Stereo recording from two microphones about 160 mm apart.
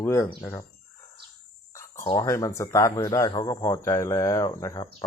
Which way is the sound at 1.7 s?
15° left (ahead or behind).